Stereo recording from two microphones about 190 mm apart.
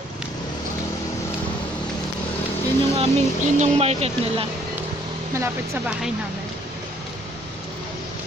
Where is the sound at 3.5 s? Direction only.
35° right (ahead or behind).